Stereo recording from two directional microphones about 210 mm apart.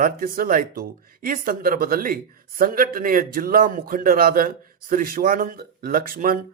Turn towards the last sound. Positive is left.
turn(degrees=-45)  # may be behind; listen again after turning